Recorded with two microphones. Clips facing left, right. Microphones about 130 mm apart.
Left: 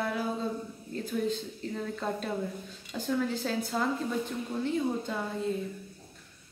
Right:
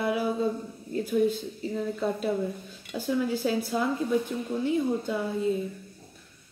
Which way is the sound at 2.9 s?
10° right (ahead or behind).